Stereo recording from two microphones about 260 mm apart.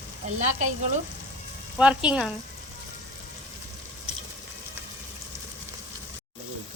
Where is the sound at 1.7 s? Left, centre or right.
Centre.